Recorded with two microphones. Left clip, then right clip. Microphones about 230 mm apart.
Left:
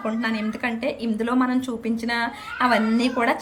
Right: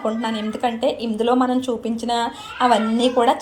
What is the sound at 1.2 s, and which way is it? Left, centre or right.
Speech, left.